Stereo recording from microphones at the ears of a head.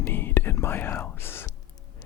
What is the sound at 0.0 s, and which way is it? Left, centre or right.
Whispering, left.